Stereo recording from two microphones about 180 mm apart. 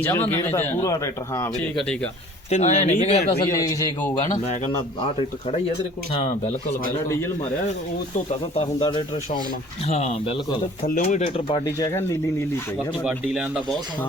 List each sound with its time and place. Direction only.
0.0 s speech: 15° left (ahead or behind)
1.7 s a man's voice: 5° left (ahead or behind)
2.5 s speech: 40° left (ahead or behind)
3.4 s speech: 20° left (ahead or behind)
8.3 s speech: 30° left (ahead or behind)
11.8 s speech: 15° left (ahead or behind)
13.1 s a man's voice: 5° right (ahead or behind)